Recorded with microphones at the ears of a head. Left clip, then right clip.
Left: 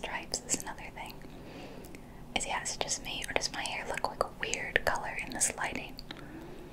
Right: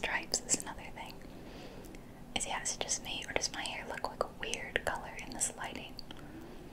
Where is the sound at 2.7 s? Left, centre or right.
Centre.